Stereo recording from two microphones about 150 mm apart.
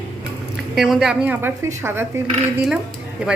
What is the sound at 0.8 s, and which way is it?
A woman's voice, centre (ahead or behind).